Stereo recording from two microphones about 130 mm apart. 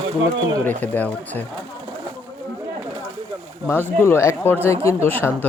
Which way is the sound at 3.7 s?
20° left (ahead or behind).